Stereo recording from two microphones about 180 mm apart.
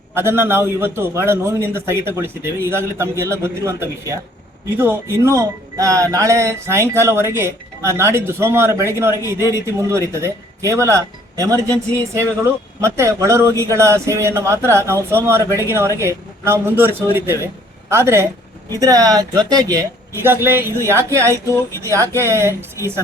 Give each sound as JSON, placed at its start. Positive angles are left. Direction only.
{"t": 0.1, "sound": "a man's voice", "side_deg": -15}